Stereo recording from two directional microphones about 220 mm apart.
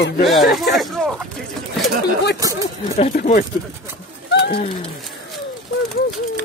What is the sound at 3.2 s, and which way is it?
Speech, 40° left (ahead or behind).